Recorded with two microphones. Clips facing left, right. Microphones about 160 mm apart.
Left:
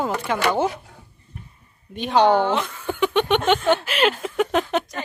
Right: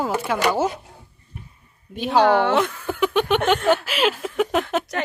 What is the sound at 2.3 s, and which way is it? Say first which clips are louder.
Speech: right 1 dB; 75° right (ahead or behind).